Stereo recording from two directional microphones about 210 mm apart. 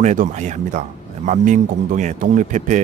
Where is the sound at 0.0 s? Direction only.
35° right (ahead or behind).